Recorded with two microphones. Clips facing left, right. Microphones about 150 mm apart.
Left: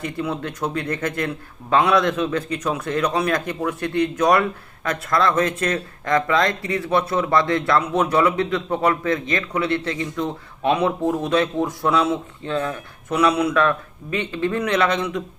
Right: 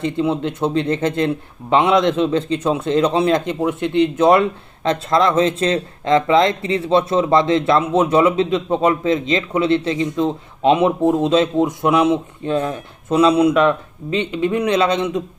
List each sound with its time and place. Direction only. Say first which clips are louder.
0.0 s speech: right 7 dB; 25° right (ahead or behind)